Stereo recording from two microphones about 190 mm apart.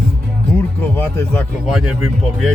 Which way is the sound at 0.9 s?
10° left (ahead or behind).